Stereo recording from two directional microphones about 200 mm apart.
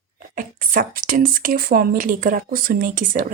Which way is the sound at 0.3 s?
45° right (ahead or behind).